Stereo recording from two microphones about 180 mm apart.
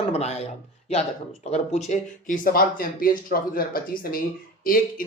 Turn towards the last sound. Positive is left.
turn(degrees=50)  # may be behind; listen again after turning